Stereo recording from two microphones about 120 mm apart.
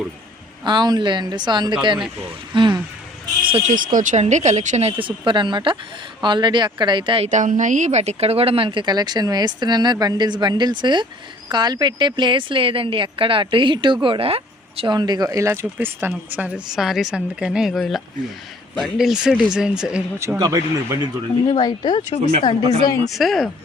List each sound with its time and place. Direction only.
0.6 s speech: 40° right (ahead or behind)
3.7 s speech: 90° right
4.9 s a woman's voice: 45° right (ahead or behind)
7.3 s a woman's voice: 90° right; by 14.8 s 55° right (ahead or behind)
14.8 s speech: 35° right (ahead or behind); by 16.5 s 15° right (ahead or behind)
16.6 s a woman's voice: 5° right (ahead or behind)
20.1 s speech: 25° right (ahead or behind)
21.4 s speech: 35° left (ahead or behind)
23.0 s a woman's voice: centre (ahead or behind)